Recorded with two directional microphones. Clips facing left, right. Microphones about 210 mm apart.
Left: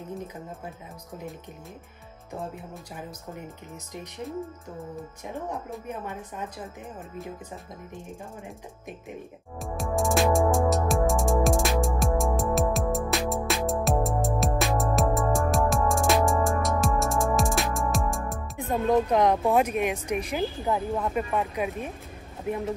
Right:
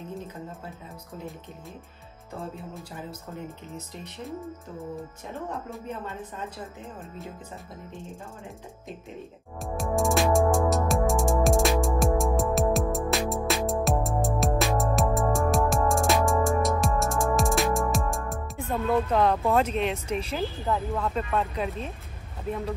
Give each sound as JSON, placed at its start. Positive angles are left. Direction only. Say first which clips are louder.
{"t": 0.2, "sound": "speech", "louder": "left 1 dB", "side_deg": 15}
{"t": 3.3, "sound": "speech", "louder": "right 2 dB", "side_deg": 15}
{"t": 5.9, "sound": "speech", "louder": "even", "side_deg": 15}
{"t": 9.6, "sound": "music", "louder": "right 1 dB", "side_deg": 0}
{"t": 18.7, "sound": "speech", "louder": "left 2 dB", "side_deg": 15}